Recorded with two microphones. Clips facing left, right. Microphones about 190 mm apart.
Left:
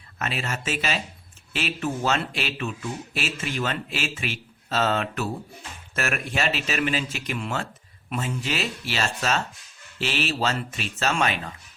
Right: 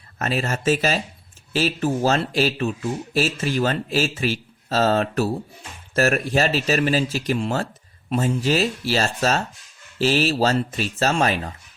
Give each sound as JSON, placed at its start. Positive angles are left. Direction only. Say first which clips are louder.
{"t": 0.2, "sound": "speech", "louder": "right 6 dB", "side_deg": -40}